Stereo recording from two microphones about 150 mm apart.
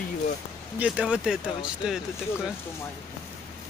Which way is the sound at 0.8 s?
10° right (ahead or behind).